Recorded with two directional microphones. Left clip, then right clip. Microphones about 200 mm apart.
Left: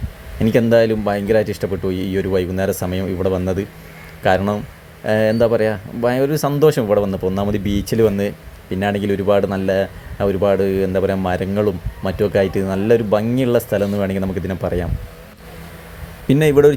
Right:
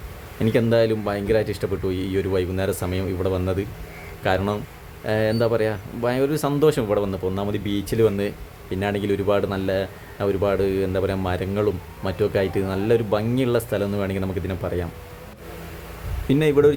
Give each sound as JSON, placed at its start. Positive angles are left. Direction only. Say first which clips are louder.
{"t": 0.3, "sound": "speech", "louder": "left 5 dB", "side_deg": 10}
{"t": 16.2, "sound": "speech", "louder": "left 5 dB", "side_deg": 20}